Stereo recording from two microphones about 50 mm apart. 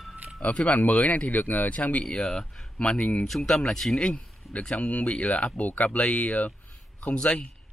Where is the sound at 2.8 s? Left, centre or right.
Left.